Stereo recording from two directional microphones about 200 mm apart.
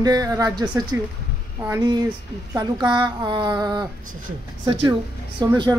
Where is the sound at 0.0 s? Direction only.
20° right (ahead or behind).